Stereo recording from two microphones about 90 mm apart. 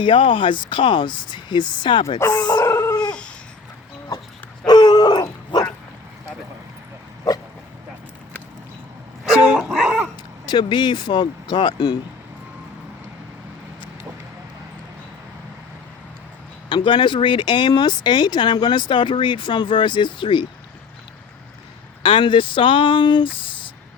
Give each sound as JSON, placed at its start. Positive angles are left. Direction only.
{"t": 0.0, "sound": "speech", "side_deg": 70}
{"t": 2.4, "sound": "howl", "side_deg": 50}
{"t": 2.6, "sound": "dog", "side_deg": 30}
{"t": 3.1, "sound": "babbling", "side_deg": 10}
{"t": 4.6, "sound": "dog", "side_deg": 50}
{"t": 9.7, "sound": "a sound", "side_deg": -10}
{"t": 10.4, "sound": "speech", "side_deg": 55}
{"t": 16.6, "sound": "speech", "side_deg": 60}
{"t": 22.0, "sound": "speech", "side_deg": 70}